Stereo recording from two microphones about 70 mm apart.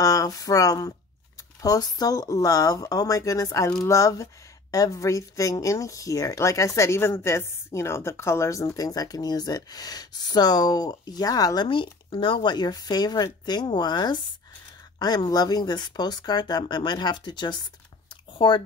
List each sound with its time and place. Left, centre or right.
0.0 s speech: left
12.4 s speech: left
15.0 s speech: left